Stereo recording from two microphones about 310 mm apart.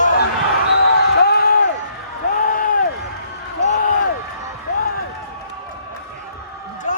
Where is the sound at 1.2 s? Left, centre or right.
Left.